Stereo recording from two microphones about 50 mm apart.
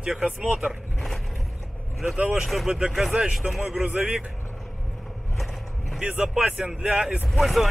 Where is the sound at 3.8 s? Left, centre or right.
Right.